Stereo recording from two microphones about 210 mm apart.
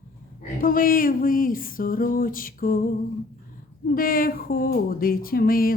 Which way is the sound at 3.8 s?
45° left (ahead or behind).